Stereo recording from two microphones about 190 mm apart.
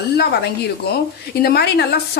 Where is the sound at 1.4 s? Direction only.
60° left (ahead or behind).